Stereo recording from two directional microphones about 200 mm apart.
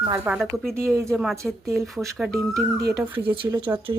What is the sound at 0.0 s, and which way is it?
Speech, 25° right (ahead or behind).